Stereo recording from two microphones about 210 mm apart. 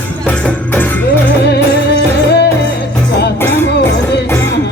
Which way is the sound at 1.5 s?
55° left (ahead or behind).